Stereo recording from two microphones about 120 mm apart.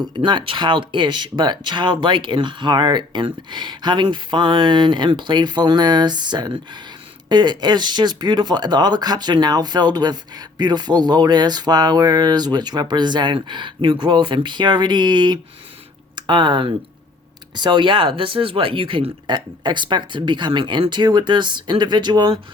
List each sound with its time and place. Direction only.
0.0 s speech: 40° right (ahead or behind)